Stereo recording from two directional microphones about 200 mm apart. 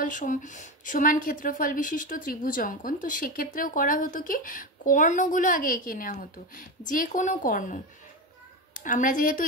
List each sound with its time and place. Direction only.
0.0 s a woman's voice: 40° left (ahead or behind)